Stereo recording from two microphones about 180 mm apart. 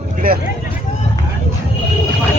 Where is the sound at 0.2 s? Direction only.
55° right (ahead or behind).